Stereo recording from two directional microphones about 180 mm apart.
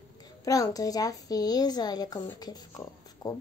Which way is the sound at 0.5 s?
20° left (ahead or behind).